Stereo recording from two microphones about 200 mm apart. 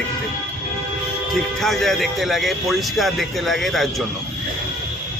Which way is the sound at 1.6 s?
Centre (ahead or behind).